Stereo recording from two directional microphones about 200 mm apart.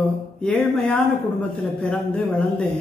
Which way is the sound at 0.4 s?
5° left (ahead or behind).